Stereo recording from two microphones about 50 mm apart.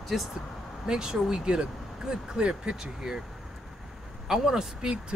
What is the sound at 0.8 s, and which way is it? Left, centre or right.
Speech, centre.